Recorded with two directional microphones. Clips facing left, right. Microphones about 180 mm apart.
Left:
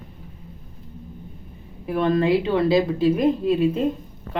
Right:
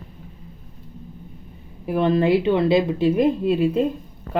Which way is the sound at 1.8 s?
25° right (ahead or behind).